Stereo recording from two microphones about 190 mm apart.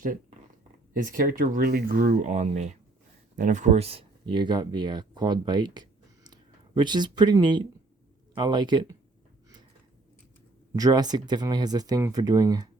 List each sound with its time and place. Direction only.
0.9 s speech: 45° right (ahead or behind); by 9.0 s 25° right (ahead or behind)
10.8 s speech: 20° right (ahead or behind)